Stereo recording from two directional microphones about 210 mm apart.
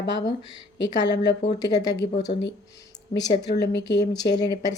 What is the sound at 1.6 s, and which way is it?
Speech, 20° left (ahead or behind).